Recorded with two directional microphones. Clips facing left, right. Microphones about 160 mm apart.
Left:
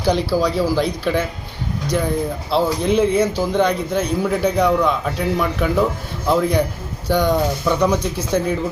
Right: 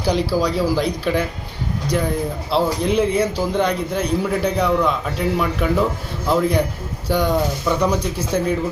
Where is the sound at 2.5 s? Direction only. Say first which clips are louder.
Left 1 dB; centre (ahead or behind).